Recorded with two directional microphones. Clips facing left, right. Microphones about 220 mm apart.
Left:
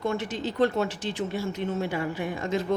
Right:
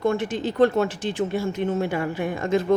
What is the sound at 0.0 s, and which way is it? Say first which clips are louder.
A woman's voice: right 5 dB; 50° right (ahead or behind).